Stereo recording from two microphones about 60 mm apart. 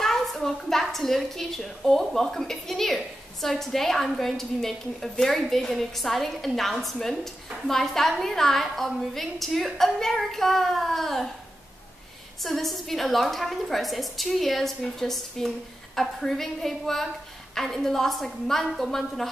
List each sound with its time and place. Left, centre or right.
0.0 s a woman's voice: centre
12.4 s a woman's voice: centre